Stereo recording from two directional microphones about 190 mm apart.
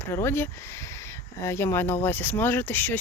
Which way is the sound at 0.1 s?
10° left (ahead or behind).